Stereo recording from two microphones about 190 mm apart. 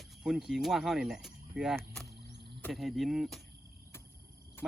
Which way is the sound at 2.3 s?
65° right (ahead or behind).